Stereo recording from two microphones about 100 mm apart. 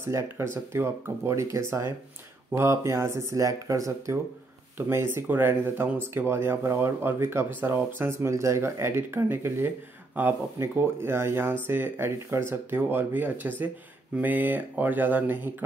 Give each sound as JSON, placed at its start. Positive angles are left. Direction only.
{"t": 0.0, "sound": "speech", "side_deg": -25}